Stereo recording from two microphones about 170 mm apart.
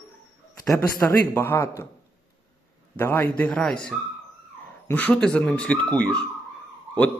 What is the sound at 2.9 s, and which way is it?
Speech, 10° left (ahead or behind).